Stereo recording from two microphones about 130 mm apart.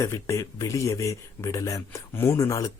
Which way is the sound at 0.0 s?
20° left (ahead or behind).